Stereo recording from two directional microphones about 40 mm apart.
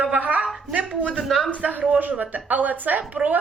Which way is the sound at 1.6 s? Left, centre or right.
Right.